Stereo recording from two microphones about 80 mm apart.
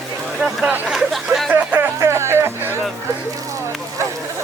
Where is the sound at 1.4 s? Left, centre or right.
Right.